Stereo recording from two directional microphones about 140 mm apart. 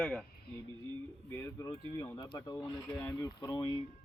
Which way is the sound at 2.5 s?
15° left (ahead or behind).